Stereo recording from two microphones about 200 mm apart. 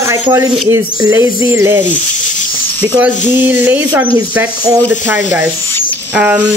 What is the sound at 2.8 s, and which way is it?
Speech, 10° right (ahead or behind).